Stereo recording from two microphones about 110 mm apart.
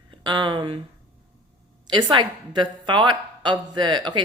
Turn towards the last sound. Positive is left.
turn(degrees=-45)  # may be behind; listen again after turning